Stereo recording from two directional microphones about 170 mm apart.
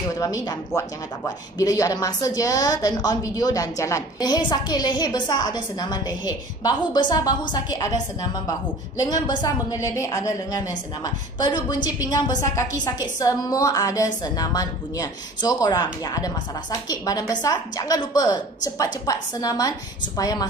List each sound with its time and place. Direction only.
0.2 s a woman's voice: 20° left (ahead or behind)